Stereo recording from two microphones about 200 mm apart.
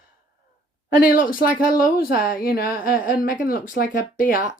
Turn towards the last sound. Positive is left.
turn(degrees=45)  # may be behind; listen again after turning